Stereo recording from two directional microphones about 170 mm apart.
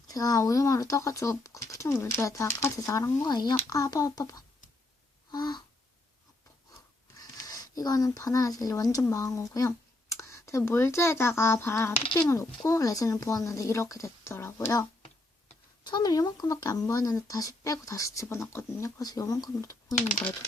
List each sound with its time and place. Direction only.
0.1 s speech: 20° left (ahead or behind)
5.3 s a sound: 25° left (ahead or behind)
7.2 s speech: 20° left (ahead or behind)